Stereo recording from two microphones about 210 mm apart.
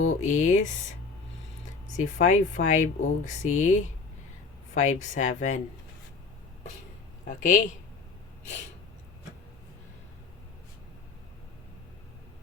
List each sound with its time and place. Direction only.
0.2 s speech: 35° left (ahead or behind)
2.0 s speech: 35° left (ahead or behind)
7.3 s speech: 35° left (ahead or behind)